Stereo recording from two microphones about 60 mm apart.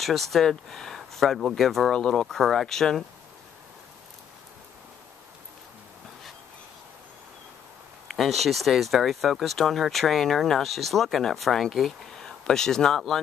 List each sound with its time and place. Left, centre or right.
0.0 s speech: centre
2.0 s speech: centre
2.2 s speech: centre
8.1 s speech: centre